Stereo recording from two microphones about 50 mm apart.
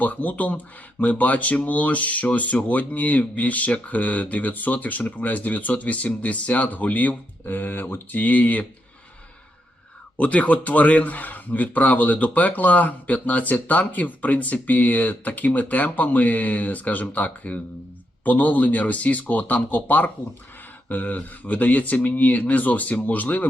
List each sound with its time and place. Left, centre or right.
0.0 s speech: left
10.2 s speech: left